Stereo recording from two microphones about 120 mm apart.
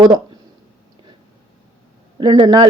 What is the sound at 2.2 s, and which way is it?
Speech, 35° right (ahead or behind).